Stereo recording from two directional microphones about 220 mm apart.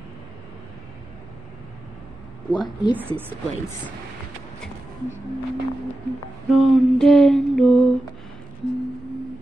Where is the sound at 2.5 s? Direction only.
20° left (ahead or behind).